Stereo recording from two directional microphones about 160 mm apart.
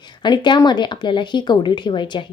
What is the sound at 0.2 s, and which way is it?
Speech, 30° left (ahead or behind).